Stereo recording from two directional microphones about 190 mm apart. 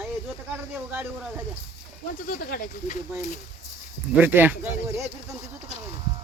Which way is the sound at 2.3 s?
50° left (ahead or behind).